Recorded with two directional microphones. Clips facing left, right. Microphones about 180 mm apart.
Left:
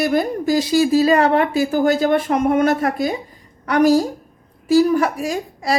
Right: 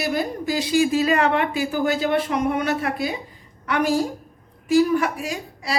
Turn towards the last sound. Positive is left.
turn(degrees=45)  # may be behind; listen again after turning